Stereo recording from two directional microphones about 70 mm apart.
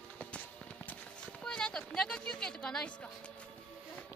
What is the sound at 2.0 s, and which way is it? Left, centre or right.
Speech, centre.